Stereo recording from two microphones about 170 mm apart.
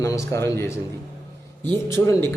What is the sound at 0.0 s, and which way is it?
Speech, 15° left (ahead or behind).